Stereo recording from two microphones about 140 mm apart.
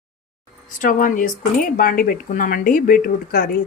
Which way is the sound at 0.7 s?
75° left (ahead or behind).